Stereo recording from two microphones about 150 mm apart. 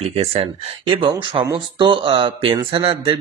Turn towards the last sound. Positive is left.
turn(degrees=-40)  # may be behind; listen again after turning